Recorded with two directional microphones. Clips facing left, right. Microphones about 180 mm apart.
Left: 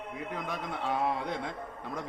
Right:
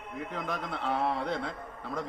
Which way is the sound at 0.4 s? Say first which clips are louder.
Right 1 dB; 10° left (ahead or behind).